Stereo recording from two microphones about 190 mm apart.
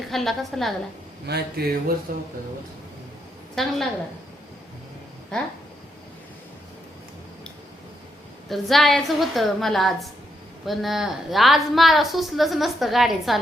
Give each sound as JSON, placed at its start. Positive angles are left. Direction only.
{"t": 0.1, "sound": "a woman's voice", "side_deg": 0}
{"t": 1.3, "sound": "speech", "side_deg": -55}
{"t": 2.1, "sound": "speech", "side_deg": -45}
{"t": 3.5, "sound": "a woman's voice", "side_deg": 0}
{"t": 8.4, "sound": "a woman's voice", "side_deg": 0}